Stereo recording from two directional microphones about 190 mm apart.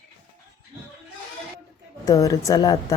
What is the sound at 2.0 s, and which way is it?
Speech, 20° left (ahead or behind).